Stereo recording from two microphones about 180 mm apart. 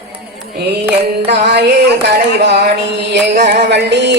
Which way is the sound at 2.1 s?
65° right (ahead or behind).